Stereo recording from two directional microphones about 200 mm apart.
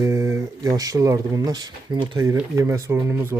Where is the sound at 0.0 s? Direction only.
15° right (ahead or behind).